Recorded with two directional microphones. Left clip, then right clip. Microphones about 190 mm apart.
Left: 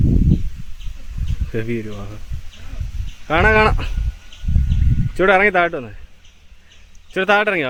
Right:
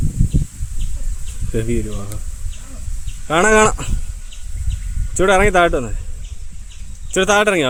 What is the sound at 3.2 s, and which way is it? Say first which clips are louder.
Speech: right 1 dB; centre (ahead or behind).